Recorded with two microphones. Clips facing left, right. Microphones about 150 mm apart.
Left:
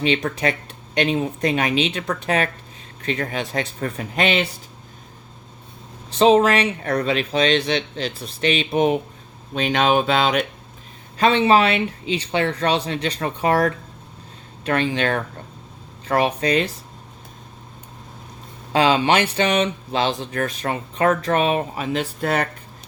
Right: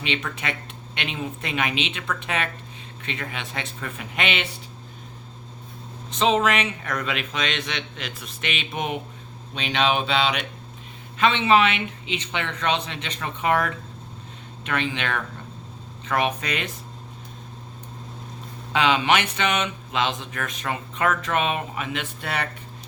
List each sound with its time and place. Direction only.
0.0 s speech: 35° left (ahead or behind)
6.1 s speech: 35° left (ahead or behind)
9.6 s a sound: 45° left (ahead or behind)
11.2 s speech: 40° left (ahead or behind)
18.7 s speech: 35° left (ahead or behind)